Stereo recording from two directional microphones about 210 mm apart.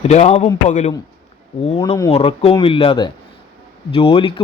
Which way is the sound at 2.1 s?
30° left (ahead or behind).